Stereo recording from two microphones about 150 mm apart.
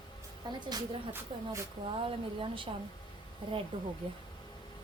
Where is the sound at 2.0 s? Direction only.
35° right (ahead or behind).